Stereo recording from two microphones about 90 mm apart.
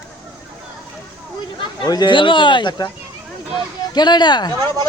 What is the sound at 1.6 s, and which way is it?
Speech, 50° left (ahead or behind).